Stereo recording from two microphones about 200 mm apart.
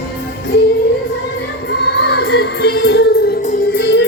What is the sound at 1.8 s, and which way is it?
Music, 60° left (ahead or behind).